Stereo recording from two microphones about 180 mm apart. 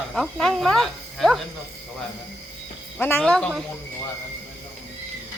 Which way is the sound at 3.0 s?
10° left (ahead or behind).